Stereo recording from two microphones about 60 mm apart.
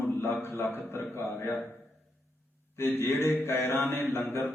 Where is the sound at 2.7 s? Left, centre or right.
Left.